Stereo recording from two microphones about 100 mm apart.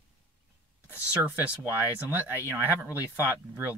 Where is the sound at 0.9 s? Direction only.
20° right (ahead or behind).